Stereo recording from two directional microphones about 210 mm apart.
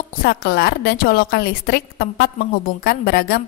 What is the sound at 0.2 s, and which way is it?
A woman's voice, 45° left (ahead or behind).